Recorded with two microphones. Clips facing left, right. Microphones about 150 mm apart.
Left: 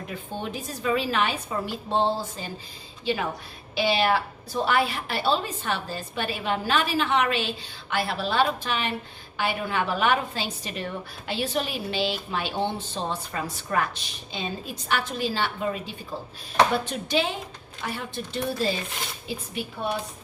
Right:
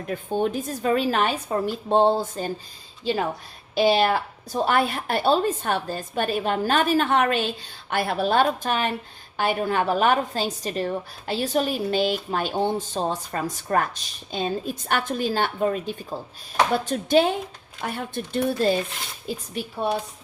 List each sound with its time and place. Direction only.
0.1 s a woman's voice: 50° right (ahead or behind)
19.3 s speech: 40° right (ahead or behind)